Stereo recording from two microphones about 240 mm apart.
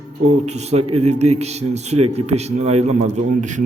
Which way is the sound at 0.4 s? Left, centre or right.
Right.